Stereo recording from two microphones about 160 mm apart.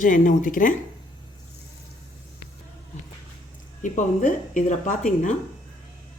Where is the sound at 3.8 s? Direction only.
55° left (ahead or behind).